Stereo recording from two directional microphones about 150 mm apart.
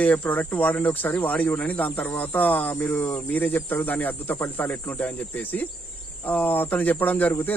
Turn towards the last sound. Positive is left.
turn(degrees=15)  # may be behind; listen again after turning